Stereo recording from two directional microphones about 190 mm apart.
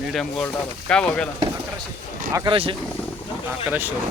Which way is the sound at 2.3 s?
25° right (ahead or behind).